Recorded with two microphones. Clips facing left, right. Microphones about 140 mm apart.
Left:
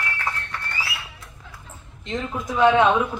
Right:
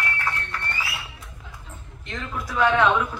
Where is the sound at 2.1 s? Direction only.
20° left (ahead or behind).